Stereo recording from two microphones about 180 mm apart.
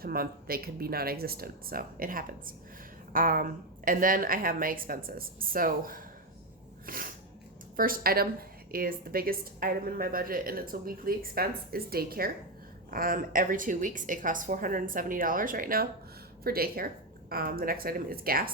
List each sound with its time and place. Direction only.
0.0 s a woman's voice: 55° right (ahead or behind)
6.8 s a sound: 50° right (ahead or behind)
7.8 s a woman's voice: 50° right (ahead or behind)